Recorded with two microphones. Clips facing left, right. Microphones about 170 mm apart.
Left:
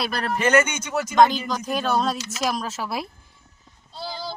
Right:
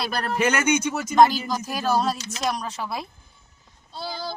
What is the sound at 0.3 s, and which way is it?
Speech, 10° right (ahead or behind).